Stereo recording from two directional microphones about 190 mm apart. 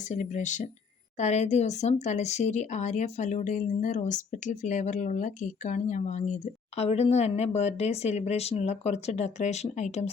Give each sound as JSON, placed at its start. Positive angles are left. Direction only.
{"t": 0.1, "sound": "speech", "side_deg": 40}